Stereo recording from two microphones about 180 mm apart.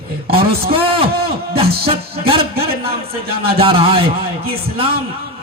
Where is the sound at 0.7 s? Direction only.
30° right (ahead or behind).